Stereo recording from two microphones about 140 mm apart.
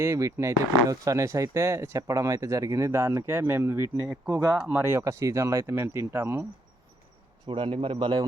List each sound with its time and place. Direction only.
0.0 s speech: 20° right (ahead or behind)
7.4 s a man's voice: 40° right (ahead or behind)